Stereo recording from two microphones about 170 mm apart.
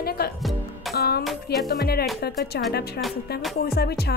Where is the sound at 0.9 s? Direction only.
65° left (ahead or behind).